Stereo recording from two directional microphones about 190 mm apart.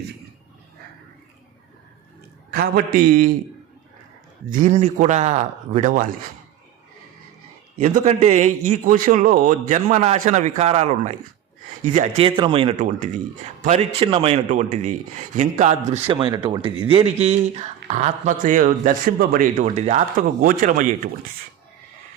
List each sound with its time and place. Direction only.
2.5 s a man's voice: 50° right (ahead or behind)
4.4 s speech: 45° right (ahead or behind)
7.8 s speech: 40° right (ahead or behind)